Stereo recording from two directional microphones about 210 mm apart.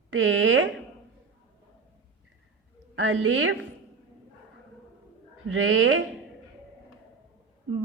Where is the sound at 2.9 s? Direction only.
70° right (ahead or behind).